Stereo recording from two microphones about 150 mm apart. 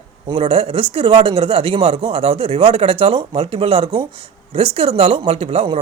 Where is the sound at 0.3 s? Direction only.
40° right (ahead or behind).